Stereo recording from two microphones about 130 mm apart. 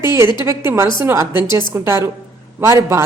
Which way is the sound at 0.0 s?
20° right (ahead or behind).